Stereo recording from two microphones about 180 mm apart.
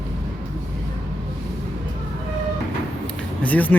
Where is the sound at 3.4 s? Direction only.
10° left (ahead or behind).